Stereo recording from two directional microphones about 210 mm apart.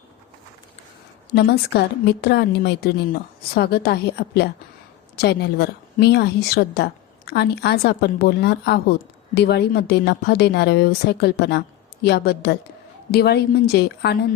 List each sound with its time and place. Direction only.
1.3 s a woman's voice: 50° left (ahead or behind)